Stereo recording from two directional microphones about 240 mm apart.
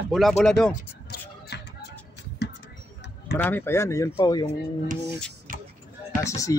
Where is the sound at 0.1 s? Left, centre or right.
Centre.